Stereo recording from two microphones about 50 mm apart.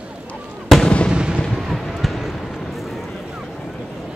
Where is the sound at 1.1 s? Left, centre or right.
Centre.